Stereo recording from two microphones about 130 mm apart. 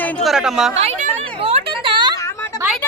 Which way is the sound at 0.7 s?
65° right (ahead or behind).